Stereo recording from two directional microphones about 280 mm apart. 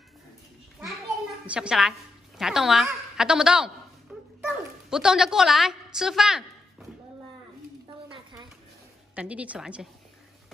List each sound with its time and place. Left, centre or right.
0.7 s a child's voice: centre
8.1 s a sound: centre
9.1 s a woman's voice: centre